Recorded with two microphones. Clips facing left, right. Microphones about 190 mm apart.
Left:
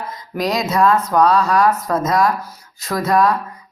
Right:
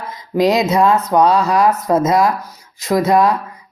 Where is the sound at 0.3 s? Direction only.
25° right (ahead or behind).